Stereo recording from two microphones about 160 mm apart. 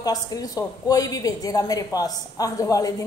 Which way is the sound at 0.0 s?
25° left (ahead or behind).